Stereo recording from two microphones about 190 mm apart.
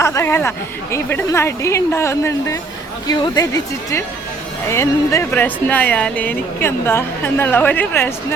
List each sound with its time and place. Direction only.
0.0 s a woman's voice: 15° left (ahead or behind)